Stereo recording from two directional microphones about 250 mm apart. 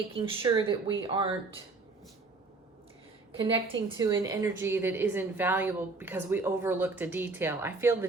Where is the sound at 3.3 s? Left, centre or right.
Right.